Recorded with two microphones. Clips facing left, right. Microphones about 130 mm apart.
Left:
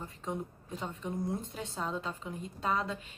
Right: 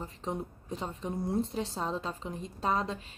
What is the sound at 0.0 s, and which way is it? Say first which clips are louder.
A woman's voice: right 2 dB; 35° right (ahead or behind).